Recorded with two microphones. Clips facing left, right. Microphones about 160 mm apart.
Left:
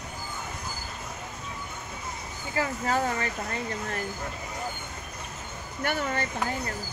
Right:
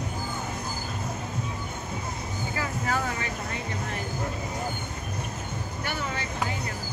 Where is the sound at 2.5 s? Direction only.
30° left (ahead or behind).